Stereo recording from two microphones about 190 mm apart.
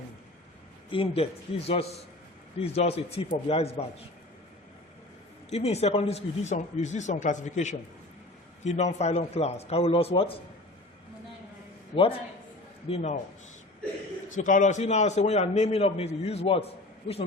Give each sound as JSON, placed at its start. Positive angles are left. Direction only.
{"t": 0.9, "sound": "a man's voice", "side_deg": 30}
{"t": 5.5, "sound": "a man's voice", "side_deg": 35}
{"t": 12.9, "sound": "a man's voice", "side_deg": 35}
{"t": 14.3, "sound": "a man's voice", "side_deg": 40}